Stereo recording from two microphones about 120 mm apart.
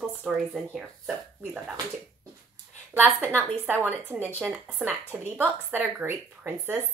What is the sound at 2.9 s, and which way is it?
A woman's voice, 20° right (ahead or behind).